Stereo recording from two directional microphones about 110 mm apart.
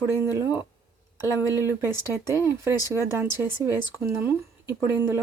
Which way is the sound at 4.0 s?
20° right (ahead or behind).